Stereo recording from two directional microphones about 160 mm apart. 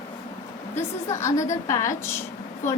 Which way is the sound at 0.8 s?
20° left (ahead or behind).